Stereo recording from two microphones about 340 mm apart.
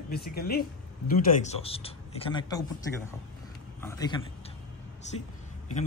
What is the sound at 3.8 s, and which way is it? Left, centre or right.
Speech, centre.